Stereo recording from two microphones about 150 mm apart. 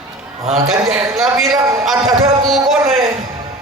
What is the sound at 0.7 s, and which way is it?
Speech, 5° right (ahead or behind).